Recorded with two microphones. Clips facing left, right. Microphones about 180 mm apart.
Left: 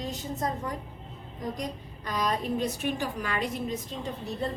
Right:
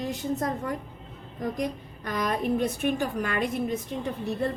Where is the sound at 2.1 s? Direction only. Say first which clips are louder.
Right 2 dB; 55° right (ahead or behind).